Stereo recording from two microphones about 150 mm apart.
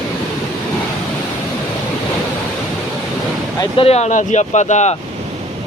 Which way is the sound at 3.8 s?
45° left (ahead or behind).